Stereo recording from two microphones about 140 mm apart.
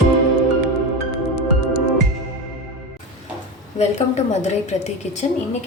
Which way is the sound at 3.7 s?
50° left (ahead or behind).